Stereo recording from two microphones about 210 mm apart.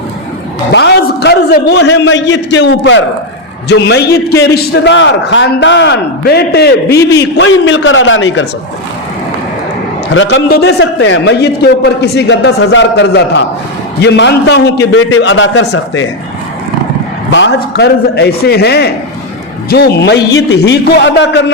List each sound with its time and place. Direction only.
0.7 s a man's voice: 55° left (ahead or behind)
7.6 s a man's voice: 65° left (ahead or behind)
10.2 s a man's voice: 55° left (ahead or behind)
17.3 s a man's voice: 60° left (ahead or behind)